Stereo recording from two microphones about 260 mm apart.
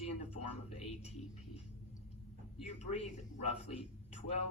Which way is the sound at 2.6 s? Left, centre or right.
Left.